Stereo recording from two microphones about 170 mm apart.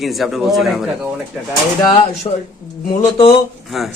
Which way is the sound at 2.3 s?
30° left (ahead or behind).